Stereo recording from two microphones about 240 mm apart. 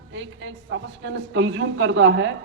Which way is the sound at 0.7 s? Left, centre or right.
Right.